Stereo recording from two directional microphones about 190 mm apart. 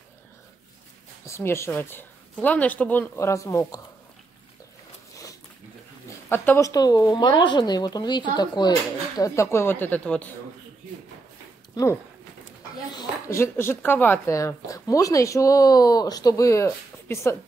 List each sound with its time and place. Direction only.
1.2 s speech: 15° left (ahead or behind)
6.2 s speech: 10° left (ahead or behind)
11.7 s speech: 15° left (ahead or behind)